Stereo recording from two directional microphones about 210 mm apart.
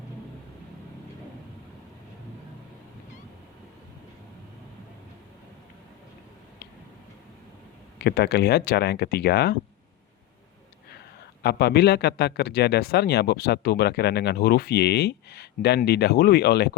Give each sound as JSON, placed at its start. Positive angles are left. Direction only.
{"t": 7.9, "sound": "speech", "side_deg": 50}
{"t": 11.4, "sound": "speech", "side_deg": 50}